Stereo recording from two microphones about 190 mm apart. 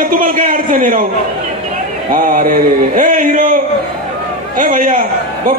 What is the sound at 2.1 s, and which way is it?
A man's voice, 45° right (ahead or behind).